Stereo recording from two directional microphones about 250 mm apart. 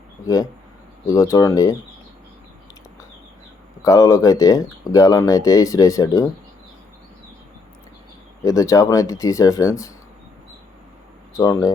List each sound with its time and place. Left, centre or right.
1.0 s speech: centre
3.8 s speech: centre
8.4 s speech: centre
11.3 s speech: centre